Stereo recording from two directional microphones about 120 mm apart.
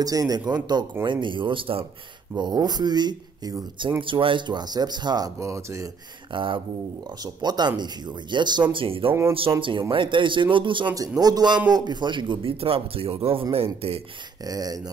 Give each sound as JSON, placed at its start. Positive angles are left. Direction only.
{"t": 0.0, "sound": "speech", "side_deg": -30}
{"t": 2.3, "sound": "speech", "side_deg": -35}
{"t": 4.0, "sound": "speech", "side_deg": -45}
{"t": 6.3, "sound": "speech", "side_deg": -45}
{"t": 8.7, "sound": "speech", "side_deg": -50}
{"t": 11.0, "sound": "speech", "side_deg": -30}
{"t": 14.4, "sound": "speech", "side_deg": -30}